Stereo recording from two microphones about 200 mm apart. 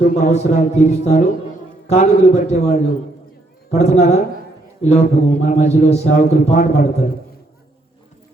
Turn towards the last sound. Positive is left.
turn(degrees=35)  # may be behind; listen again after turning